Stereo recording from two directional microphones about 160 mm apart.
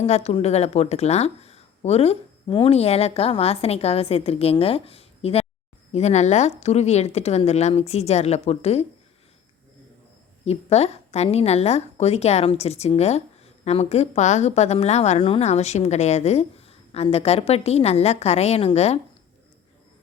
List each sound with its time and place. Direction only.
0.0 s a woman's voice: 40° left (ahead or behind)
10.4 s a woman's voice: 40° left (ahead or behind)